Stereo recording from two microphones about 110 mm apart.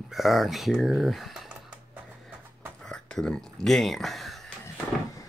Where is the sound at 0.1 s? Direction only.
Centre (ahead or behind).